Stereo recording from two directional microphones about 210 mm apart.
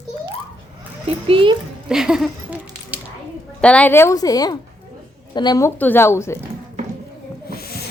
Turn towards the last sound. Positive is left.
turn(degrees=45)  # may be behind; listen again after turning